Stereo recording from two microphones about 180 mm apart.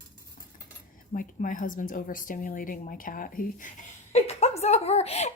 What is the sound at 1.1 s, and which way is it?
A woman's voice, 50° left (ahead or behind).